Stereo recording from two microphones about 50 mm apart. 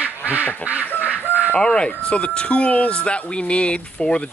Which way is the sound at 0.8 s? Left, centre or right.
Left.